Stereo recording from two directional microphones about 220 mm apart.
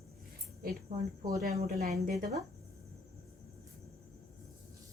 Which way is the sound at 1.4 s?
40° right (ahead or behind).